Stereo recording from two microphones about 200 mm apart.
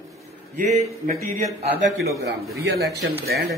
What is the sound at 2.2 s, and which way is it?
A man's voice, 55° right (ahead or behind).